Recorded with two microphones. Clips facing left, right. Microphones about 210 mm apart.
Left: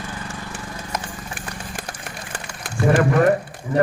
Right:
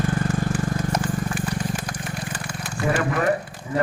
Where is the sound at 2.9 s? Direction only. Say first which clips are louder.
Left 7 dB; 45° left (ahead or behind).